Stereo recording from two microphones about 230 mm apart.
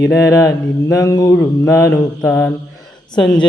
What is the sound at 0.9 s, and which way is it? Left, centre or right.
Mantra, centre.